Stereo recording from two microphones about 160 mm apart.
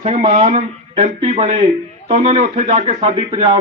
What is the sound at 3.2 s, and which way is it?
Speech, 30° right (ahead or behind).